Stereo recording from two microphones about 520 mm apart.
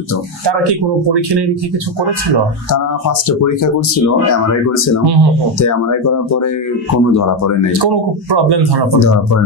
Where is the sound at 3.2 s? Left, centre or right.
Left.